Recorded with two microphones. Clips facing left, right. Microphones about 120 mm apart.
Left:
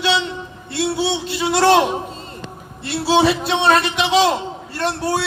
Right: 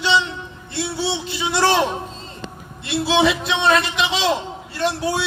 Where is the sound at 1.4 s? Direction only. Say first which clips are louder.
Left 4 dB; 55° left (ahead or behind).